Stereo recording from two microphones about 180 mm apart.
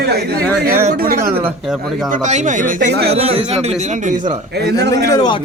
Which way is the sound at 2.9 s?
65° right (ahead or behind).